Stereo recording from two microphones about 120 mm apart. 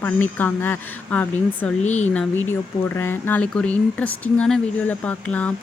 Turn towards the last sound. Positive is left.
turn(degrees=10)  # may be behind; listen again after turning